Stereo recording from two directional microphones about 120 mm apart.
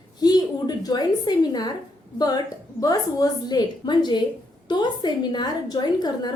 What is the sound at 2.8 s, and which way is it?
A woman's voice, 30° left (ahead or behind).